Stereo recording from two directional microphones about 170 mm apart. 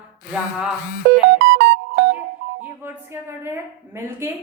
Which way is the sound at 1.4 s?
90° right.